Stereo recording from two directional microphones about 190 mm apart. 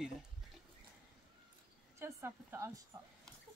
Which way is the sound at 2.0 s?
15° right (ahead or behind).